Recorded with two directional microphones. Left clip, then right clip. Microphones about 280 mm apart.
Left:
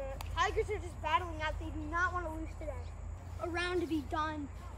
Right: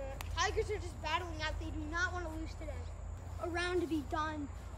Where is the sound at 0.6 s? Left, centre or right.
Centre.